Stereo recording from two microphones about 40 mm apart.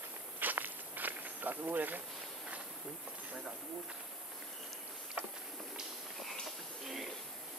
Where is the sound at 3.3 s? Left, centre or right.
Right.